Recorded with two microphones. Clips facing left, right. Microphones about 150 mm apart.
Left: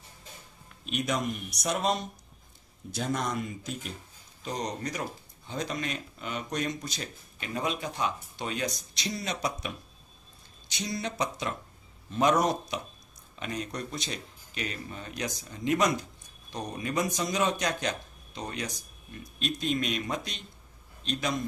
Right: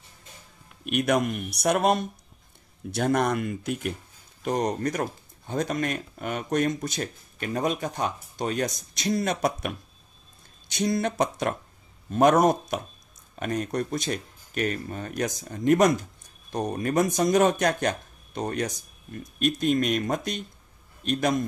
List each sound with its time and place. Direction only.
0.8 s a man's voice: 60° right (ahead or behind)